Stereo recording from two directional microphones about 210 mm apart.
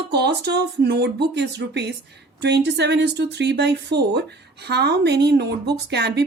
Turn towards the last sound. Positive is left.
turn(degrees=-50)  # may be behind; listen again after turning